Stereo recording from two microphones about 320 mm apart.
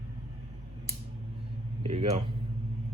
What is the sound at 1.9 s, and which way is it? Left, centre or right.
Speech, centre.